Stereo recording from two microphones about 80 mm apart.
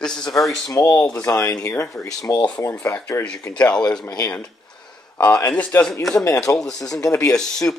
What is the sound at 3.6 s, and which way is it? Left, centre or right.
Speech, centre.